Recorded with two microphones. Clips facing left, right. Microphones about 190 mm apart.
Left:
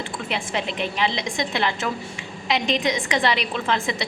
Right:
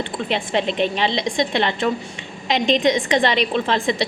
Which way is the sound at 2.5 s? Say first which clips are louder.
Right 5 dB; 30° right (ahead or behind).